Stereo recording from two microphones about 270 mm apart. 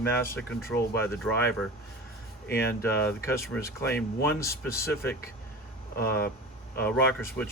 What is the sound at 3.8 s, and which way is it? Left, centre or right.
Speech, left.